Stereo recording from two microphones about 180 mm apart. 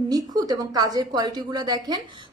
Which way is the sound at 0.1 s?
20° right (ahead or behind).